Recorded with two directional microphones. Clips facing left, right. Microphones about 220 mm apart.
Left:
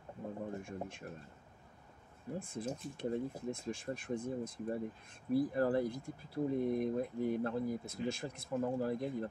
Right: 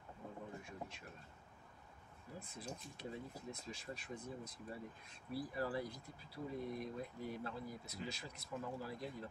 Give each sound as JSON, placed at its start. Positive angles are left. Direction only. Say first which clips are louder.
{"t": 0.6, "sound": "speech", "louder": "left 7 dB", "side_deg": 50}
{"t": 2.3, "sound": "speech", "louder": "left 9 dB", "side_deg": 50}